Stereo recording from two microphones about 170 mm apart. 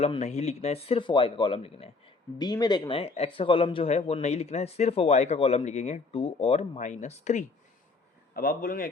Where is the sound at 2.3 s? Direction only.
25° left (ahead or behind); by 7.4 s 45° left (ahead or behind).